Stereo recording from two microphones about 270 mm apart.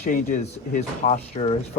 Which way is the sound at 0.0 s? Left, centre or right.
Left.